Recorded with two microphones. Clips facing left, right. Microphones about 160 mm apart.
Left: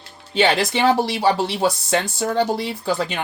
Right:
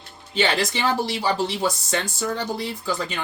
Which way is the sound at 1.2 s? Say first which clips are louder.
Left 4 dB; 65° left (ahead or behind).